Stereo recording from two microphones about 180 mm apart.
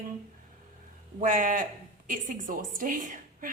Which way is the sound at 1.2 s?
45° right (ahead or behind).